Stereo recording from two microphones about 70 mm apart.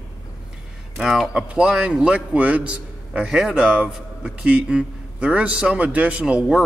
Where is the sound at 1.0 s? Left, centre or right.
Centre.